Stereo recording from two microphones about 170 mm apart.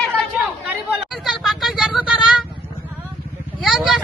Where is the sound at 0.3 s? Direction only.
5° right (ahead or behind).